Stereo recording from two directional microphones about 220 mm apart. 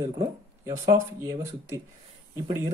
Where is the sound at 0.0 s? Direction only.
15° right (ahead or behind).